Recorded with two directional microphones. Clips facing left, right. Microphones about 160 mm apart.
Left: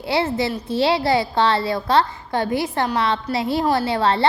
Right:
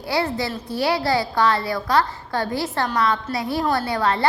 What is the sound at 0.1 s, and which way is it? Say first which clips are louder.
A woman's voice: left 2 dB; 25° left (ahead or behind).